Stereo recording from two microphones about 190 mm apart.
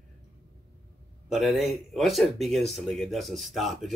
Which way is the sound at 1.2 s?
Centre (ahead or behind).